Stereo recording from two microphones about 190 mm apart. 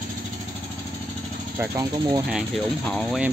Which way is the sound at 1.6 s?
20° right (ahead or behind).